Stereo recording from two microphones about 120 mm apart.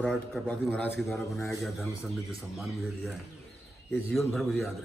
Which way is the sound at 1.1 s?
25° left (ahead or behind).